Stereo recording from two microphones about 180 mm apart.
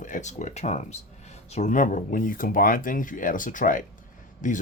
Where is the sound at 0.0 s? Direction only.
45° left (ahead or behind).